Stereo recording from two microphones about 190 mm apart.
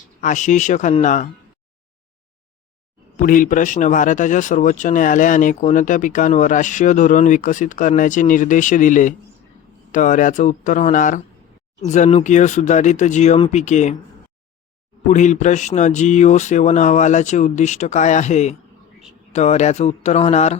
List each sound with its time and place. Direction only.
0.2 s speech: 40° left (ahead or behind)
3.2 s speech: 45° left (ahead or behind)
15.0 s speech: 40° left (ahead or behind)